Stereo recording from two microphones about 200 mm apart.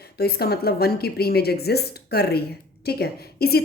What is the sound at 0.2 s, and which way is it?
A woman's voice, 50° left (ahead or behind).